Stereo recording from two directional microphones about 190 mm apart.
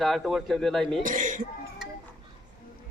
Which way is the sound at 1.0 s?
45° right (ahead or behind).